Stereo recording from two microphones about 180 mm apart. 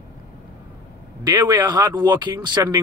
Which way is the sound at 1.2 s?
25° right (ahead or behind).